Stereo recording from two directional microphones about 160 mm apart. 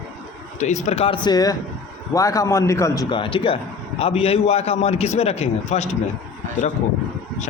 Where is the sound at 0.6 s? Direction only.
45° left (ahead or behind).